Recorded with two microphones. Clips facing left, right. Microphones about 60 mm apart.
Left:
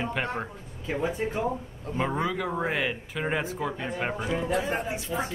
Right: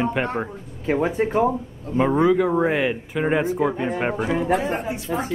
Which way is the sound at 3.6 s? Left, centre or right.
Centre.